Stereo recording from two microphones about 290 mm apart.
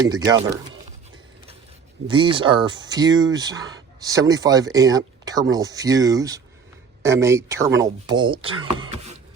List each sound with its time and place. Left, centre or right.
0.1 s speech: centre
2.0 s speech: centre
8.8 s a sound: centre